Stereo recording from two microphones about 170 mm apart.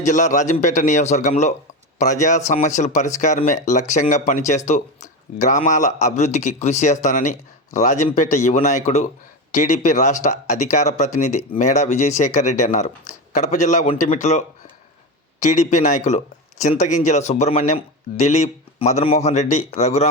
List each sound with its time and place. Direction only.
0.0 s speech: 45° left (ahead or behind)